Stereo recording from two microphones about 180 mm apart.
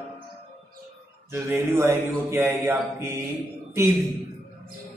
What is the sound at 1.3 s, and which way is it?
Speech, 15° right (ahead or behind).